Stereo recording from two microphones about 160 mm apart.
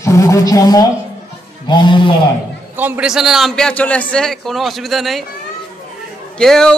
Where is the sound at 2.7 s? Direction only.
10° right (ahead or behind).